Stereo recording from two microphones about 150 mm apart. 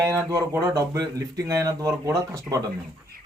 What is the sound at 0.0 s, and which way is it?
Speech, 20° right (ahead or behind).